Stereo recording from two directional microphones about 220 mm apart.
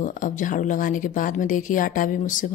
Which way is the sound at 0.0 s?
35° left (ahead or behind).